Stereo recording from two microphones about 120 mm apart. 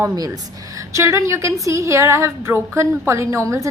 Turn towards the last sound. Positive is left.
turn(degrees=-25)  # may be behind; listen again after turning